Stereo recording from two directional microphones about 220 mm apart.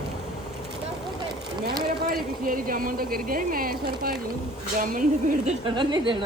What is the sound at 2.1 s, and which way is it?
Speech, 40° right (ahead or behind).